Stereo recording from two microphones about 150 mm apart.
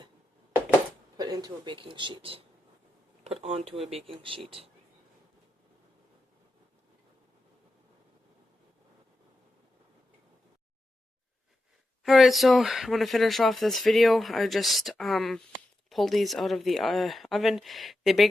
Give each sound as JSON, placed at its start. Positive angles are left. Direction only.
{"t": 1.1, "sound": "speech", "side_deg": -25}
{"t": 12.0, "sound": "speech", "side_deg": 0}